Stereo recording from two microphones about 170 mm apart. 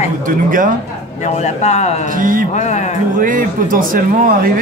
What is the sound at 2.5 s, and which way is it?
Speech, 45° left (ahead or behind).